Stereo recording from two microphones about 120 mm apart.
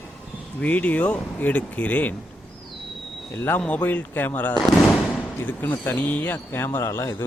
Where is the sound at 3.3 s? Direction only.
20° left (ahead or behind).